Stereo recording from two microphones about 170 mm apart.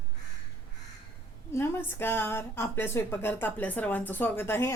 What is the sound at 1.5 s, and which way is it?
A woman's voice, 15° left (ahead or behind).